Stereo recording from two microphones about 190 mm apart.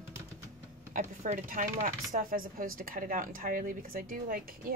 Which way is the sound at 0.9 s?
45° right (ahead or behind).